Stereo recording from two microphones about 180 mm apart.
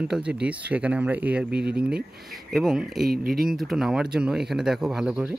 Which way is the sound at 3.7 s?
5° right (ahead or behind).